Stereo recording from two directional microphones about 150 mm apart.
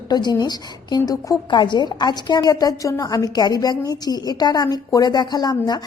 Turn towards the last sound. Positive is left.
turn(degrees=30)  # may be behind; listen again after turning